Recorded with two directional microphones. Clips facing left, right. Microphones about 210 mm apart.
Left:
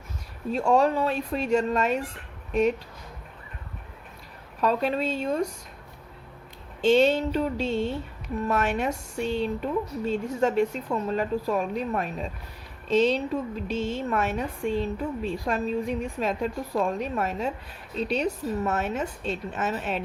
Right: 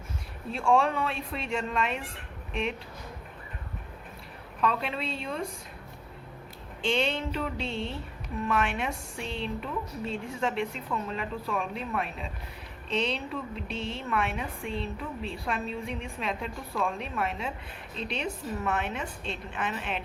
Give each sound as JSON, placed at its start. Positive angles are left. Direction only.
{"t": 0.5, "sound": "a woman's voice", "side_deg": 40}
{"t": 4.6, "sound": "a woman's voice", "side_deg": 40}
{"t": 6.8, "sound": "a woman's voice", "side_deg": 40}